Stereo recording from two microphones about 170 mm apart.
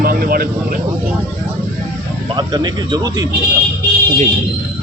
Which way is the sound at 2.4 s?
25° right (ahead or behind).